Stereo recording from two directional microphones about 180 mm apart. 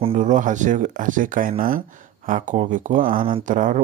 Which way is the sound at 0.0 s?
40° right (ahead or behind).